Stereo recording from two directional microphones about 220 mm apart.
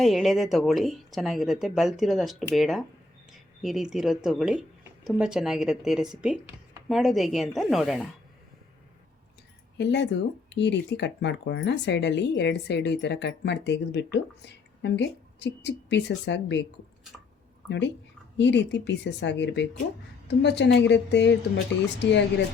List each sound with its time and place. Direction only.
0.0 s speech: centre (ahead or behind)
9.7 s speech: 50° left (ahead or behind)
17.7 s speech: 55° left (ahead or behind)